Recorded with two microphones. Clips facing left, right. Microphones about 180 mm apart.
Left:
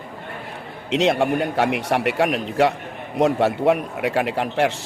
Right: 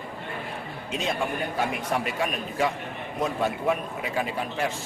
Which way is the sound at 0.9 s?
75° left (ahead or behind).